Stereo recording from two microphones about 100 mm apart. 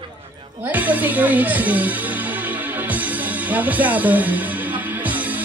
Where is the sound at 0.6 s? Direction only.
15° right (ahead or behind).